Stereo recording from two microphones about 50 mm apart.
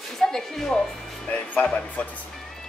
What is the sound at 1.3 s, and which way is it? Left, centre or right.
Speech, left.